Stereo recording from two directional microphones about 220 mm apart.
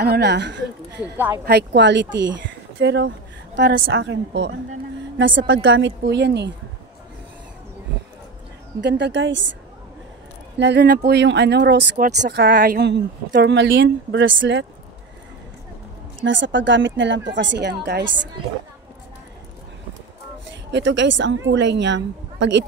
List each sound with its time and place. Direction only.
0.0 s a woman's voice: 45° right (ahead or behind)
1.1 s speech: 10° right (ahead or behind)
1.4 s speech: 50° right (ahead or behind)
8.8 s speech: 55° right (ahead or behind)
10.6 s a woman's voice: 50° right (ahead or behind)
16.2 s speech: 55° right (ahead or behind)
20.4 s a woman's voice: 55° right (ahead or behind)